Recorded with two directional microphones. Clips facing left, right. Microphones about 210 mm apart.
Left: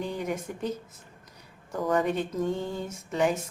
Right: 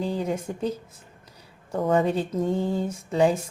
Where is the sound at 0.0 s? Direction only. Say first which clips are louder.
Right 4 dB; 30° right (ahead or behind).